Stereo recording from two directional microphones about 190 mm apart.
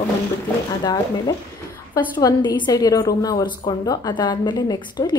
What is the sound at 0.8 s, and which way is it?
A woman's voice, 20° left (ahead or behind).